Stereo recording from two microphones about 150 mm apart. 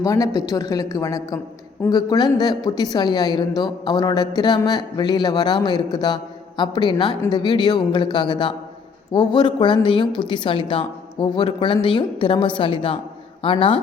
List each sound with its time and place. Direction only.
0.0 s a woman's voice: 20° left (ahead or behind)